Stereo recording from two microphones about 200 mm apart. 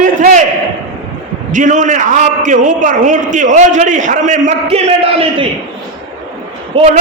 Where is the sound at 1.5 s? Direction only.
40° right (ahead or behind).